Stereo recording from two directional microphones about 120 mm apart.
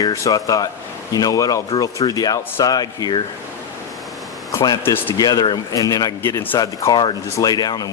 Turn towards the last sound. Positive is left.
turn(degrees=35)  # may be behind; listen again after turning